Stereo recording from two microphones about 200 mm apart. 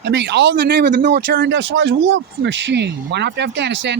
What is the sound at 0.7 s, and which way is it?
Speech, 55° right (ahead or behind).